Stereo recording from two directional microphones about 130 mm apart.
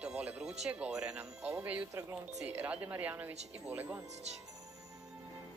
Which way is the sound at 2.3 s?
10° right (ahead or behind).